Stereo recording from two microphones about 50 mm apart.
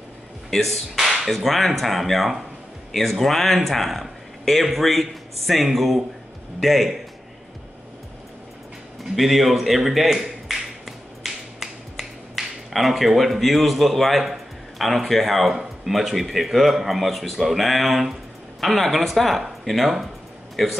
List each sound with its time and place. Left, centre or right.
0.5 s speech: centre
9.1 s a sound: centre
15.6 s speech: centre